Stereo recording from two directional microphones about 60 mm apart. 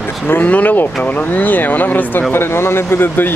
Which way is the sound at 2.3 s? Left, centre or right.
Left.